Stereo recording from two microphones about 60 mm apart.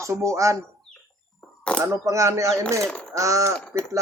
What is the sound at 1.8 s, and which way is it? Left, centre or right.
Speech, right.